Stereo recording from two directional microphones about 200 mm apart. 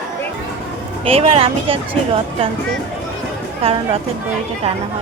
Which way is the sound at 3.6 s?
30° right (ahead or behind).